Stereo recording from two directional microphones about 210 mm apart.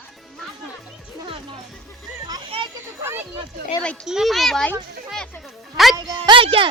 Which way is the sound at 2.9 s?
10° right (ahead or behind).